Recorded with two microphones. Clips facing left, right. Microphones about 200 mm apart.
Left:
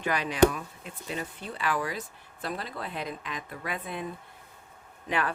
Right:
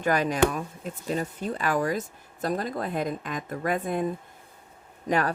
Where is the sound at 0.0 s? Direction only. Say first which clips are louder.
Even; 45° right (ahead or behind).